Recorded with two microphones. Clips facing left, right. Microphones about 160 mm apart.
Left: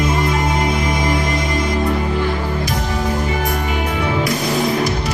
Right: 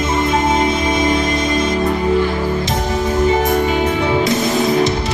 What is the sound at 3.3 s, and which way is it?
Music, 25° right (ahead or behind).